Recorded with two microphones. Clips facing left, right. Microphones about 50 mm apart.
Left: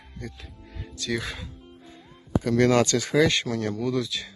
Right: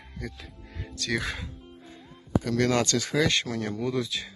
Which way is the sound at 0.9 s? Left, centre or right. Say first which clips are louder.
Even; right.